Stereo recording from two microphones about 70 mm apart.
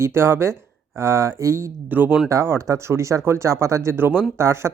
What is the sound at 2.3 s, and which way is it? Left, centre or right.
Speech, right.